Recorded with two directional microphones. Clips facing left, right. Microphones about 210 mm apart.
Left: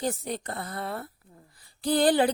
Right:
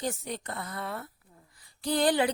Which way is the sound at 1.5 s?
35° left (ahead or behind).